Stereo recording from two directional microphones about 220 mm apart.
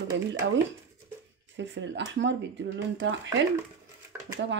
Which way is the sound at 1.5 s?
55° right (ahead or behind).